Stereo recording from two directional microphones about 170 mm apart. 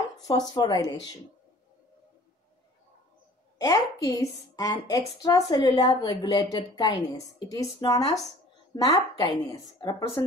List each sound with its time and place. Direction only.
0.6 s a woman's voice: 25° left (ahead or behind)
3.5 s a woman's voice: 20° left (ahead or behind)